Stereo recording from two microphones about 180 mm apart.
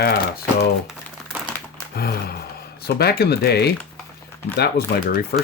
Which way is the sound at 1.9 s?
60° left (ahead or behind).